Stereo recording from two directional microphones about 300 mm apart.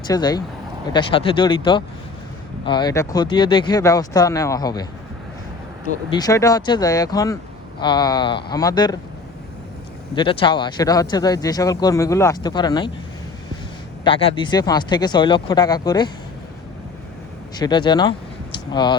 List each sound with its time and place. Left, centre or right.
0.1 s a man's voice: centre
6.1 s a man's voice: centre
10.2 s a man's voice: centre
14.0 s a man's voice: centre
17.6 s a man's voice: centre